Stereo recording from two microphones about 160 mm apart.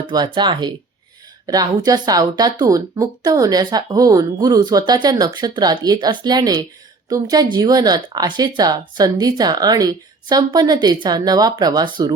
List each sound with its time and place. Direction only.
0.1 s speech: 30° right (ahead or behind)